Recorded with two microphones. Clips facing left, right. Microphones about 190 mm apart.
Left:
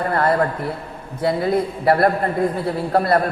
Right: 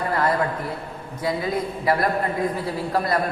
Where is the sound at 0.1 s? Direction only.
55° left (ahead or behind).